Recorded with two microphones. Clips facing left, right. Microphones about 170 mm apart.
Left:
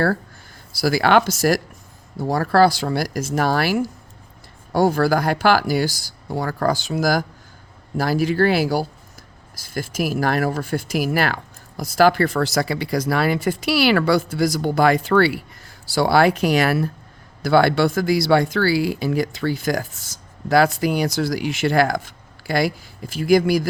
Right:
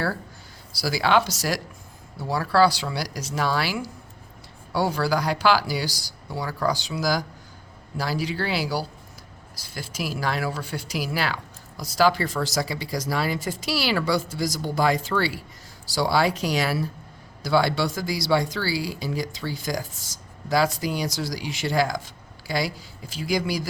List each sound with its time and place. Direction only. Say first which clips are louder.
0.7 s speech: left 5 dB; 50° left (ahead or behind)